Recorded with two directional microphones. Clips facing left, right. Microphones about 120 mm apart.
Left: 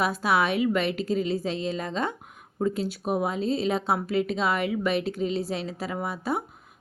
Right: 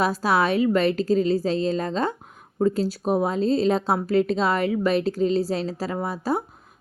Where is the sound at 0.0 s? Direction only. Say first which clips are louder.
Right 3 dB; 35° right (ahead or behind).